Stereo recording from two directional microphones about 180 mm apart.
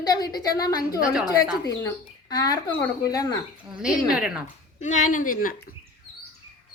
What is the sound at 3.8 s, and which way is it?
Speech, 5° right (ahead or behind).